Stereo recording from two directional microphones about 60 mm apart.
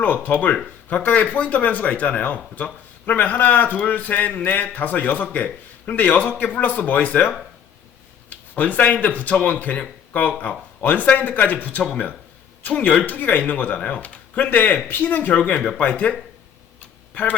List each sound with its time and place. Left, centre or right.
0.0 s speech: left